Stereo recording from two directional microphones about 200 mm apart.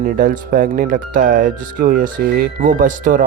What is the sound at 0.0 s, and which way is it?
Speech, 45° right (ahead or behind).